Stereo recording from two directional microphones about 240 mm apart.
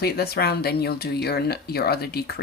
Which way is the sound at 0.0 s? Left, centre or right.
Left.